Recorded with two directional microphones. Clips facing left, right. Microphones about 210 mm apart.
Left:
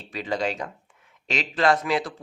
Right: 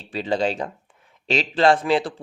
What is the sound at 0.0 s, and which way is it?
Speech, 30° right (ahead or behind).